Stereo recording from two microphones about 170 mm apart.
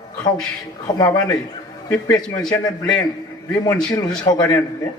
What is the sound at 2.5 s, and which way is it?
A man's voice, 25° left (ahead or behind).